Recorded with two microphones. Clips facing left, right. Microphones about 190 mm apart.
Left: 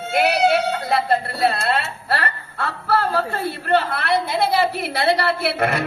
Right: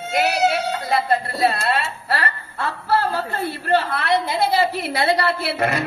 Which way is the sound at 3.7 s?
55° left (ahead or behind).